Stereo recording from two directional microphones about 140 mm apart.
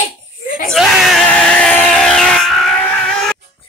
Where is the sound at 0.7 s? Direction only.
Centre (ahead or behind).